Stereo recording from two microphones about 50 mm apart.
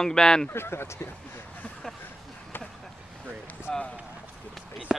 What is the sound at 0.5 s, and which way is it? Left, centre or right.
Speech, left.